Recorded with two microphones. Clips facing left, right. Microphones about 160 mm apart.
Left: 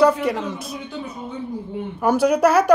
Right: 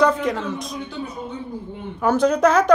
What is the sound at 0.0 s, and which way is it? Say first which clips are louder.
Speech: left 2 dB; 10° left (ahead or behind).